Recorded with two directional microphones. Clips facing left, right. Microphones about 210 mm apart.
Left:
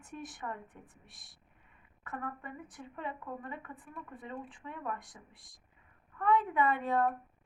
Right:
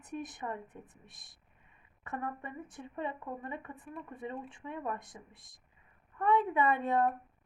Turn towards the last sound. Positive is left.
turn(degrees=-20)  # may be behind; listen again after turning